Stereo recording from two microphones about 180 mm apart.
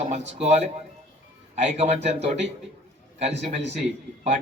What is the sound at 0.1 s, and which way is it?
Speech, 35° right (ahead or behind).